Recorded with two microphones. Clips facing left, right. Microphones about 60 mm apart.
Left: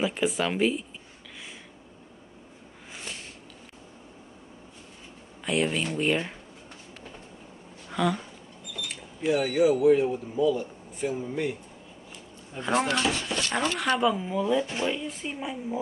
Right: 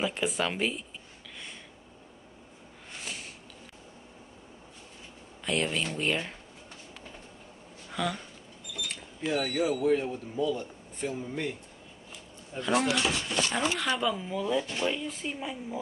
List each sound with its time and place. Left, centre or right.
0.0 s speech: centre
5.4 s a man's voice: centre
7.9 s speech: centre
9.2 s a man's voice: centre
12.5 s speech: left
12.8 s speech: left
13.9 s a man's voice: centre